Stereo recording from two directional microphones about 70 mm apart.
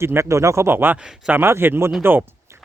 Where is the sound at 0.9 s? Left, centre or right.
Centre.